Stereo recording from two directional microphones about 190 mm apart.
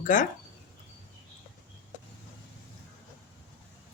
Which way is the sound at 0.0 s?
45° left (ahead or behind).